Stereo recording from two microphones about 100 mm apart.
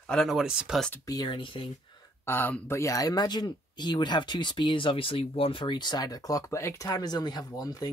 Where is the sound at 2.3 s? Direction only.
20° left (ahead or behind).